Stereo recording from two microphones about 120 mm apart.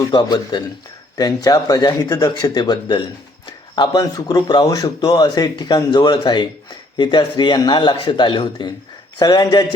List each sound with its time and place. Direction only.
0.0 s speech: 35° left (ahead or behind)